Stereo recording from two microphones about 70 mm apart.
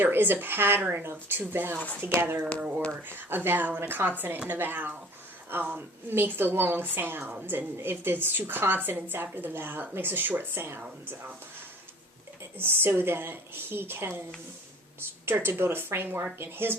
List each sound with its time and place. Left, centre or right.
0.0 s a woman's voice: right
2.6 s a woman's voice: centre
2.9 s a woman's voice: right
12.5 s a woman's voice: right
15.3 s a woman's voice: right